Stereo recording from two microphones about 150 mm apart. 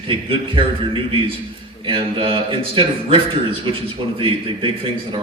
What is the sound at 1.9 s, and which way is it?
A man's voice, 35° right (ahead or behind).